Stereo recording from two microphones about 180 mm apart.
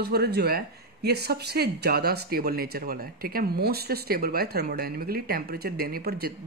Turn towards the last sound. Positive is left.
turn(degrees=-60)  # may be behind; listen again after turning